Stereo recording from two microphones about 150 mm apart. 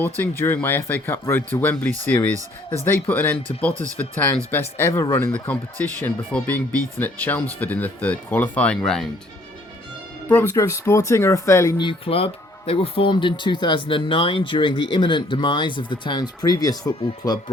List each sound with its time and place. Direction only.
0.0 s speech: 15° left (ahead or behind)
10.2 s speech: 15° left (ahead or behind)
11.8 s speech: 35° left (ahead or behind)